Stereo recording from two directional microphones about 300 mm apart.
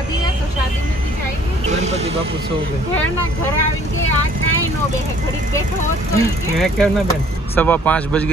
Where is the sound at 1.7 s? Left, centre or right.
Right.